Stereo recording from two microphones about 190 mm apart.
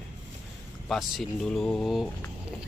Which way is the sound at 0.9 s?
Centre (ahead or behind).